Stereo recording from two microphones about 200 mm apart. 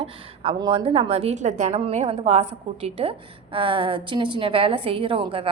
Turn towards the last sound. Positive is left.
turn(degrees=-25)  # may be behind; listen again after turning